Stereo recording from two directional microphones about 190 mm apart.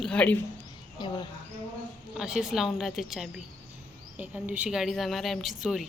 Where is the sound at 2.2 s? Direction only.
5° right (ahead or behind).